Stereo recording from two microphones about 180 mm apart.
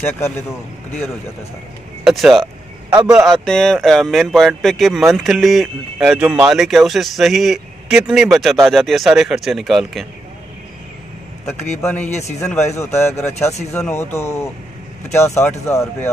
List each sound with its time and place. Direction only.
2.0 s vehicle: centre (ahead or behind)
3.1 s speech: centre (ahead or behind)
11.8 s speech: 10° left (ahead or behind)
12.1 s a man's voice: 40° left (ahead or behind)
12.4 s speech: 15° left (ahead or behind)